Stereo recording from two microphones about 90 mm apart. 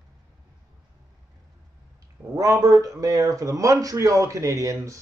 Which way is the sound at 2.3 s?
40° right (ahead or behind).